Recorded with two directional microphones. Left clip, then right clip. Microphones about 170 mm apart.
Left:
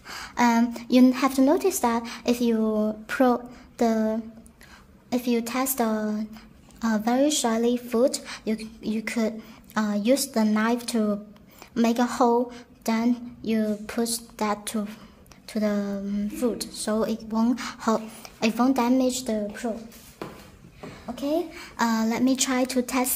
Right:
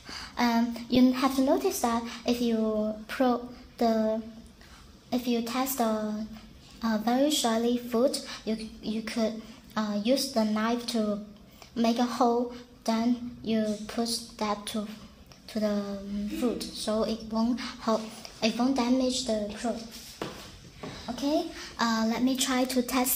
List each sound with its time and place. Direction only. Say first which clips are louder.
0.0 s a woman's voice: left 6 dB; 40° left (ahead or behind)
21.1 s a woman's voice: left 2 dB; 45° left (ahead or behind); by 23.1 s 25° left (ahead or behind)